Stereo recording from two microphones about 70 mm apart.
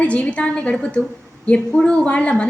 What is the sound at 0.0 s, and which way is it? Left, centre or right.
A woman's voice, centre.